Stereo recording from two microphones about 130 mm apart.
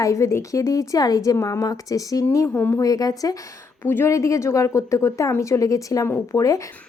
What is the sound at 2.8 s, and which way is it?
A woman's voice, 30° left (ahead or behind).